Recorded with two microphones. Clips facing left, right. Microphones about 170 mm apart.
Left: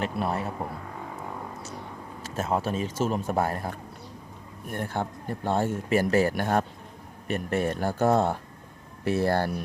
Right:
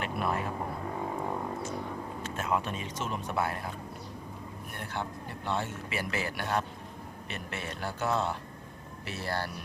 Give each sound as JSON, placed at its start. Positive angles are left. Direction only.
{"t": 0.0, "sound": "speech", "side_deg": 35}
{"t": 2.2, "sound": "speech", "side_deg": 40}